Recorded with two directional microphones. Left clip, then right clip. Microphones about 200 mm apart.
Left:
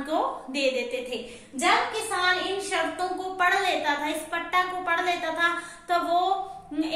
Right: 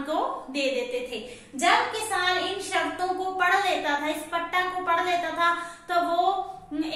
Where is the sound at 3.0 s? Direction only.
20° left (ahead or behind).